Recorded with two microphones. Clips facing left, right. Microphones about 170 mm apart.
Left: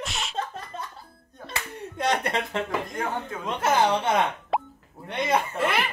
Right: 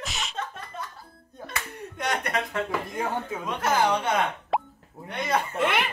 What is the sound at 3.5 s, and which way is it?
Speech, 25° left (ahead or behind).